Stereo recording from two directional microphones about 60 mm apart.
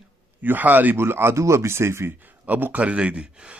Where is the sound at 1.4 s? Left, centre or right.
Right.